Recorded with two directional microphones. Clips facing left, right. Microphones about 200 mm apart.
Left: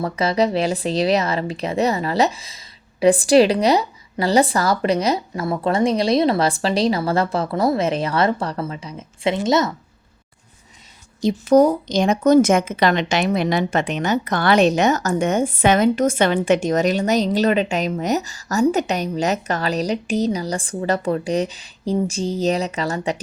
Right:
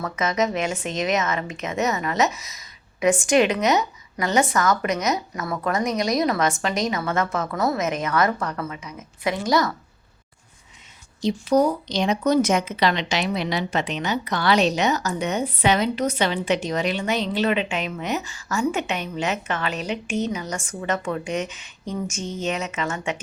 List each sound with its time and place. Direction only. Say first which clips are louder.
0.0 s a woman's voice: left 4 dB; 30° left (ahead or behind)
11.2 s a woman's voice: left 5 dB; 50° left (ahead or behind)